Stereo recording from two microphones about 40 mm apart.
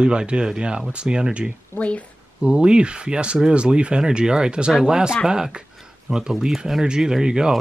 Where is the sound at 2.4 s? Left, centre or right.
Right.